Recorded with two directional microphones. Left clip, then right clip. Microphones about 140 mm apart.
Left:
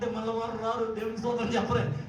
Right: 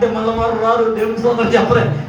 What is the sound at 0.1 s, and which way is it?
A man's voice, 45° left (ahead or behind).